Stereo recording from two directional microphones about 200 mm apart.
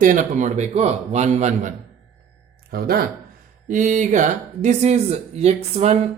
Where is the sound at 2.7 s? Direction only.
50° right (ahead or behind).